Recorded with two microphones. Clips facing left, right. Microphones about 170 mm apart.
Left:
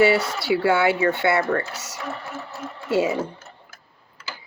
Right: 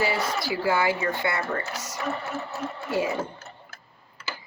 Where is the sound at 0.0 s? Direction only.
75° left (ahead or behind).